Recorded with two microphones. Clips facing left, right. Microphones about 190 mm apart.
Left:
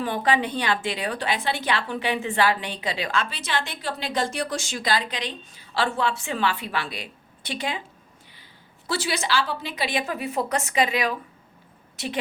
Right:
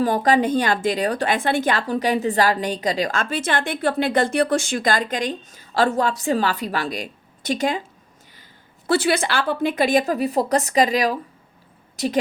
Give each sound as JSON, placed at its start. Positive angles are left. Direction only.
{"t": 0.0, "sound": "a woman's voice", "side_deg": -40}
{"t": 8.9, "sound": "a woman's voice", "side_deg": -55}